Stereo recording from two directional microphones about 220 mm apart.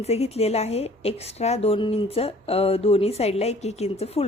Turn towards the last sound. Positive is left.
turn(degrees=30)  # may be behind; listen again after turning